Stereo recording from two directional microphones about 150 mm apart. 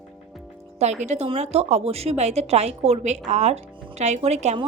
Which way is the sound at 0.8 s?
50° right (ahead or behind).